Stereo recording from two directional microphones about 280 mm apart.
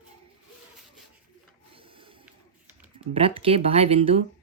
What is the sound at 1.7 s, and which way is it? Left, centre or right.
Printer, centre.